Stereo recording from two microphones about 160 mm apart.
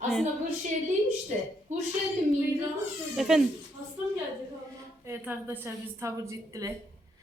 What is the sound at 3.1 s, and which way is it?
Speech, 5° right (ahead or behind).